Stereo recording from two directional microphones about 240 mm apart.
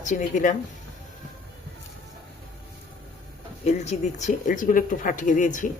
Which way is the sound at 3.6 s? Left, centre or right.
Left.